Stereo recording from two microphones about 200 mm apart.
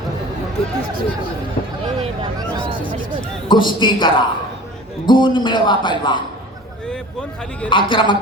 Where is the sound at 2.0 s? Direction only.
25° right (ahead or behind).